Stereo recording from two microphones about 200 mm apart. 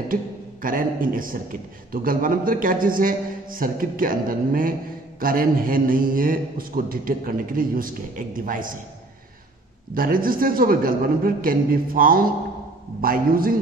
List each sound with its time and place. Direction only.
0.1 s speech: 45° right (ahead or behind)
9.9 s speech: 45° right (ahead or behind)